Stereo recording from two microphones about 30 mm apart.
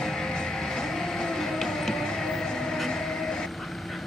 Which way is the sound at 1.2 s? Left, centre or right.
Centre.